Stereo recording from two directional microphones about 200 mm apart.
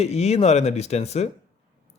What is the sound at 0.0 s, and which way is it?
Speech, 30° left (ahead or behind).